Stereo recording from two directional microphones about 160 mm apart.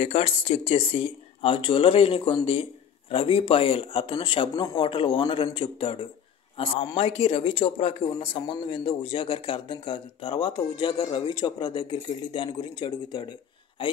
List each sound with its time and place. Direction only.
0.0 s a man's voice: 40° left (ahead or behind)